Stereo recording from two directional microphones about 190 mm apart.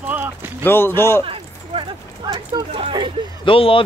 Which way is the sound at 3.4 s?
30° left (ahead or behind).